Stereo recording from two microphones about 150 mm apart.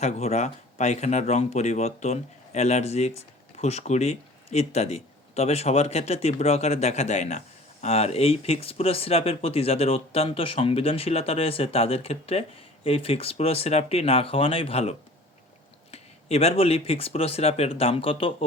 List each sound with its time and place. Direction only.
0.0 s speech: 45° left (ahead or behind)